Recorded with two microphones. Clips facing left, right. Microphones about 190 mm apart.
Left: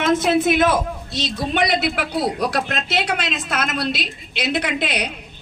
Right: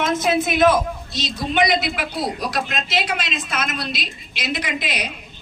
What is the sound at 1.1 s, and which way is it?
A man's voice, 60° left (ahead or behind).